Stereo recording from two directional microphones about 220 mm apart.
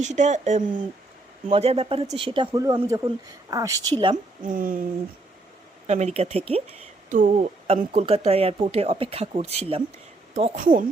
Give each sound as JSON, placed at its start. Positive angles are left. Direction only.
{"t": 0.0, "sound": "speech", "side_deg": -30}
{"t": 0.6, "sound": "speech", "side_deg": -20}
{"t": 4.0, "sound": "speech", "side_deg": -35}
{"t": 5.9, "sound": "speech", "side_deg": -30}